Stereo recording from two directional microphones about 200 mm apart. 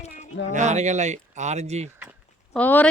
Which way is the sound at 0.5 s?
35° right (ahead or behind).